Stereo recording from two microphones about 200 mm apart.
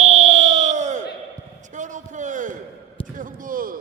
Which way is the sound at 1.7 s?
40° right (ahead or behind).